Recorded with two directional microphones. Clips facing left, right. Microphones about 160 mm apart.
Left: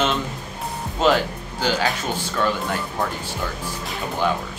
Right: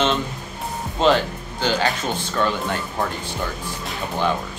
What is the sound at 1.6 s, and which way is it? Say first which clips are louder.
Speech: right 1 dB; centre (ahead or behind).